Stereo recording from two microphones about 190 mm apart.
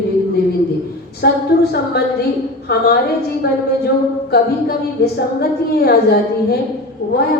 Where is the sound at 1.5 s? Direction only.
55° left (ahead or behind).